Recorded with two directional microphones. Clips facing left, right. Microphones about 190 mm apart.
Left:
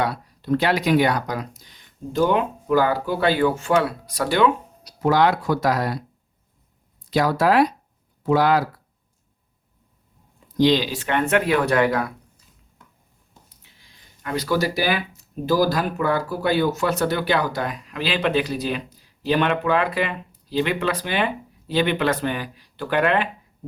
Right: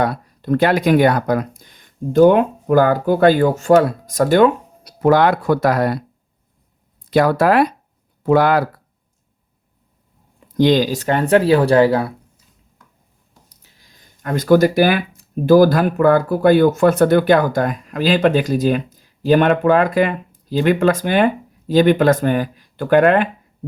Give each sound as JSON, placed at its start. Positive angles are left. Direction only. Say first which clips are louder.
{"t": 0.0, "sound": "speech", "louder": "right 5 dB", "side_deg": -50}
{"t": 7.1, "sound": "speech", "louder": "right 5 dB", "side_deg": -55}
{"t": 10.6, "sound": "speech", "louder": "right 4 dB", "side_deg": -50}
{"t": 13.6, "sound": "speech", "louder": "right 2 dB", "side_deg": -45}